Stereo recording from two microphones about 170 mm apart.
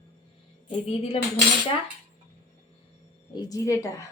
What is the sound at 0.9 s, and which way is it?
Speech, 35° left (ahead or behind).